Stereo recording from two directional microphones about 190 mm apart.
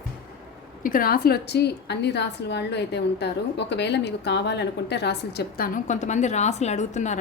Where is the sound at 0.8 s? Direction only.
45° left (ahead or behind).